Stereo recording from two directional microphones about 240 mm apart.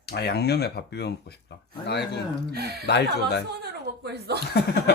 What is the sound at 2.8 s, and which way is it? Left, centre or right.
Speech, left.